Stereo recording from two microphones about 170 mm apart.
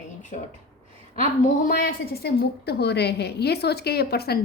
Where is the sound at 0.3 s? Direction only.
45° left (ahead or behind).